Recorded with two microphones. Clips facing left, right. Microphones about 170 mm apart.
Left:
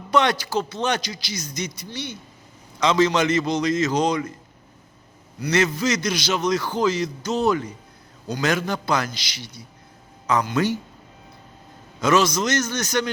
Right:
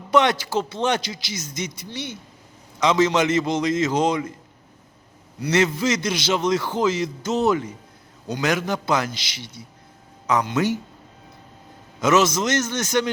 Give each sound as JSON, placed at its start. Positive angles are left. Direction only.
{"t": 0.1, "sound": "a man's voice", "side_deg": -20}
{"t": 5.4, "sound": "a man's voice", "side_deg": -25}
{"t": 11.9, "sound": "a man's voice", "side_deg": -20}